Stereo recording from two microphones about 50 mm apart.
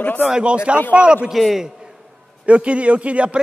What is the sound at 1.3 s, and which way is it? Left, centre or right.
Speech, centre.